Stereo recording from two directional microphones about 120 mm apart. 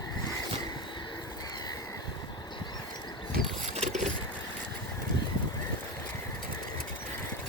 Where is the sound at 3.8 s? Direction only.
85° right.